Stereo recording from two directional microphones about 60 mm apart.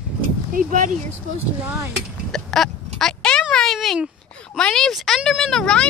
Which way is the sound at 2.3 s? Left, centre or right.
Centre.